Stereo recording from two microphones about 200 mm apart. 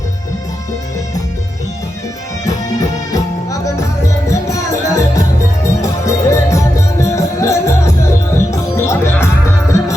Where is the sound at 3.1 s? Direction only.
15° left (ahead or behind).